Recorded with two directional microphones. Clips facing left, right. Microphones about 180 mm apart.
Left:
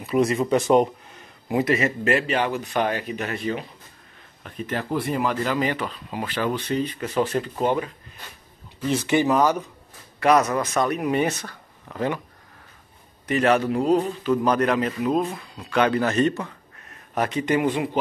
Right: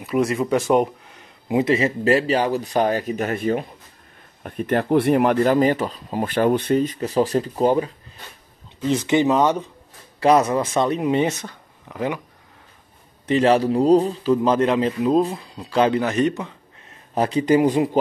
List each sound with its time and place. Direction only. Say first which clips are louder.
0.0 s speech: even; 5° right (ahead or behind)
1.5 s speech: right 3 dB; 25° right (ahead or behind)
8.8 s a man's voice: right 3 dB; 20° right (ahead or behind)
13.3 s a man's voice: right 3 dB; 30° right (ahead or behind)
16.0 s speech: right 1 dB; 15° right (ahead or behind)
17.1 s speech: right 5 dB; 30° right (ahead or behind)